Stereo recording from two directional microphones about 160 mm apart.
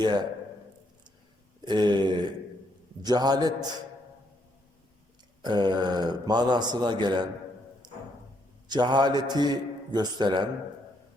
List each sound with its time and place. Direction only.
1.6 s a man's voice: 30° right (ahead or behind)
5.4 s a man's voice: 25° right (ahead or behind)
7.8 s music: 25° right (ahead or behind)
8.6 s a man's voice: 25° right (ahead or behind)